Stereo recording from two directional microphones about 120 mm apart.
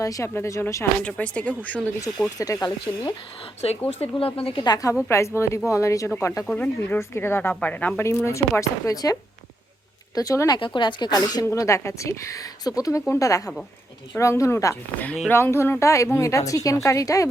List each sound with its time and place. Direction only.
0.0 s speech: 25° left (ahead or behind)
1.0 s speech: 10° left (ahead or behind)
2.4 s speech: 30° left (ahead or behind)
3.8 s a woman's voice: 55° left (ahead or behind)
4.6 s speech: 30° left (ahead or behind)
6.4 s speech: 15° left (ahead or behind); by 9.1 s 30° left (ahead or behind)
10.2 s speech: 30° left (ahead or behind)
10.6 s speech: 40° left (ahead or behind)